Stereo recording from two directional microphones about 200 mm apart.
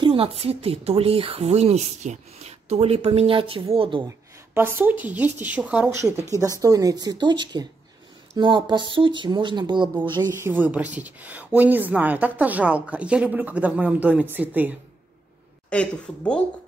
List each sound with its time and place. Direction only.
0.0 s speech: 30° right (ahead or behind)
4.6 s speech: 10° right (ahead or behind)
10.5 s speech: 10° right (ahead or behind)
15.7 s speech: 5° left (ahead or behind)